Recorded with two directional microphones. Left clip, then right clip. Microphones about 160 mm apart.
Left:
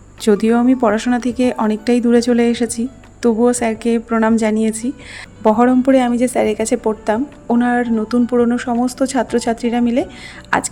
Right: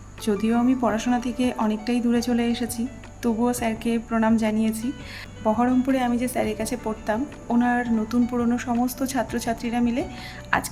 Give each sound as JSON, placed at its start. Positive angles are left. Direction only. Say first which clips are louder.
{"t": 0.3, "sound": "a woman's voice", "louder": "left 9 dB", "side_deg": 50}